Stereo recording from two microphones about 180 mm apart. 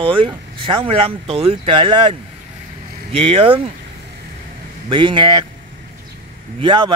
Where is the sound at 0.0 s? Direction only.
30° right (ahead or behind).